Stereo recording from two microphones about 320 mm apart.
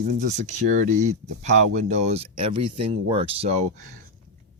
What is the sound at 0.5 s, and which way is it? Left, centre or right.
Speech, right.